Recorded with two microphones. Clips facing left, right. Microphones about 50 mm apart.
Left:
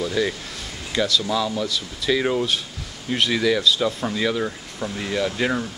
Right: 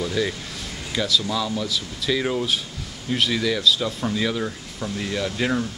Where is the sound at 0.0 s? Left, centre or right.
Centre.